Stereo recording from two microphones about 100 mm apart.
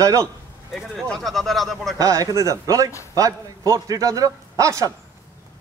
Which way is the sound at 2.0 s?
35° right (ahead or behind).